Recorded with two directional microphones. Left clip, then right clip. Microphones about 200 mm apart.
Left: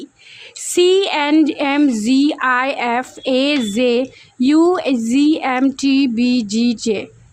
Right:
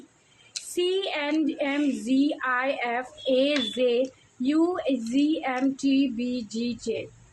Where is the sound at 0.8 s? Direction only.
55° left (ahead or behind).